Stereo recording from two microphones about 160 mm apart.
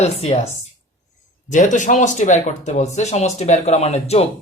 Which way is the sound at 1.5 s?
50° left (ahead or behind).